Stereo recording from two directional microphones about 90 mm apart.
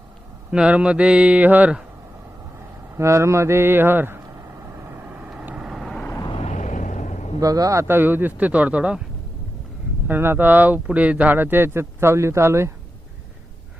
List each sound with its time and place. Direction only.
0.5 s speech: 10° right (ahead or behind)
2.9 s vehicle: 30° right (ahead or behind)
5.0 s vehicle: 15° right (ahead or behind)
7.3 s speech: 40° right (ahead or behind); by 9.0 s 15° right (ahead or behind)
10.1 s speech: 25° right (ahead or behind)